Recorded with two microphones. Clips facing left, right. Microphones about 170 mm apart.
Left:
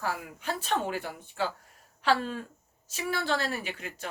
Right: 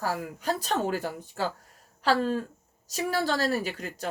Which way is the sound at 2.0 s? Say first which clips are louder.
Right 3 dB; 40° right (ahead or behind).